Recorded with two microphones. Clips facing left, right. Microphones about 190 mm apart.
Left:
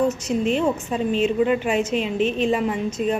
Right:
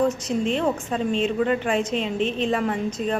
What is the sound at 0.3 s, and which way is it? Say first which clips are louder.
Speech: left 2 dB; 30° right (ahead or behind).